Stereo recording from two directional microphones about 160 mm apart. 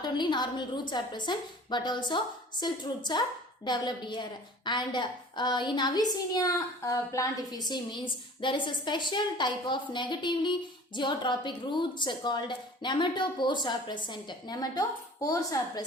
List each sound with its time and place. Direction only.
0.0 s a woman's voice: 30° left (ahead or behind)